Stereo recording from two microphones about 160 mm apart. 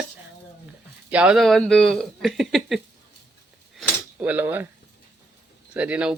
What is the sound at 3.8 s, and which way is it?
Cutlery, 10° right (ahead or behind).